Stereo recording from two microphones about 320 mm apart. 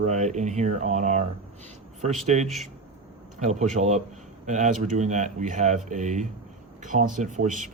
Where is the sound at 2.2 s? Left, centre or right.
Right.